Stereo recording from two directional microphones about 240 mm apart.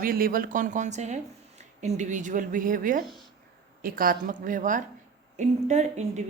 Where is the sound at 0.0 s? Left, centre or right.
Right.